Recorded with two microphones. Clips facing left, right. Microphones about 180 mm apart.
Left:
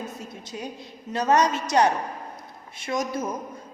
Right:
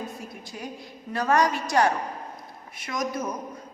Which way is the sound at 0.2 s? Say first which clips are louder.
Left 2 dB; 20° left (ahead or behind).